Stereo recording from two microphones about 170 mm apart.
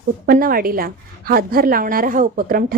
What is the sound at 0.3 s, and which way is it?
A woman's voice, 60° right (ahead or behind).